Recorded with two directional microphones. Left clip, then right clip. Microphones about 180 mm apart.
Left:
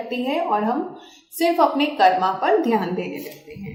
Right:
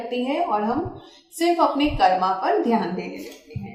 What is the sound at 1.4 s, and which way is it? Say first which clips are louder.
A woman's voice: left 2 dB; 45° left (ahead or behind).